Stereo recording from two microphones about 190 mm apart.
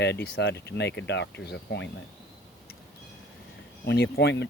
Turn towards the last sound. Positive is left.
turn(degrees=60)  # may be behind; listen again after turning